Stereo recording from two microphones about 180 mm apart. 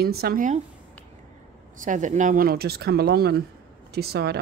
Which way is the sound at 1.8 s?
45° right (ahead or behind).